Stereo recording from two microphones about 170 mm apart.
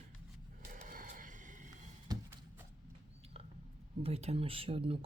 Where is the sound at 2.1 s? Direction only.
20° right (ahead or behind).